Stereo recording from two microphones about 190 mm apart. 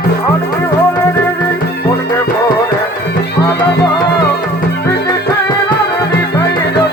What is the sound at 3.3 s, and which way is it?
Music, 60° left (ahead or behind).